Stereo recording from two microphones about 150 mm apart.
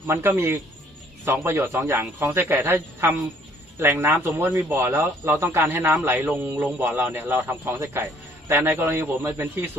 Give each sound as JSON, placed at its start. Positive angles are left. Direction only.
{"t": 0.1, "sound": "a man's voice", "side_deg": -15}